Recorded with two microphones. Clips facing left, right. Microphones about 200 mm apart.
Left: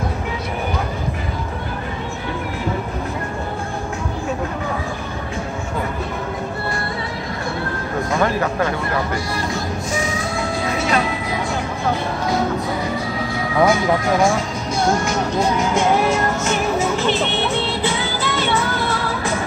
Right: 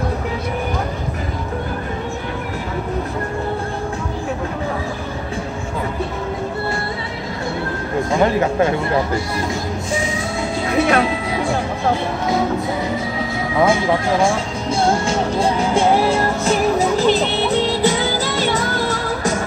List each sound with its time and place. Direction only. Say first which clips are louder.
8.1 s speech: right 3 dB; 25° right (ahead or behind)
10.8 s speech: right 6 dB; 60° right (ahead or behind)
13.6 s music: even; 25° right (ahead or behind); by 19.3 s 40° right (ahead or behind)